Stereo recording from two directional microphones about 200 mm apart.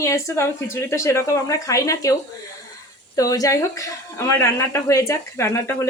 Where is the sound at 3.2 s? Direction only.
15° left (ahead or behind).